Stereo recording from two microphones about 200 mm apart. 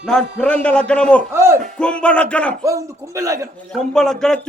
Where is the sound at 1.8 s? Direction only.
5° left (ahead or behind).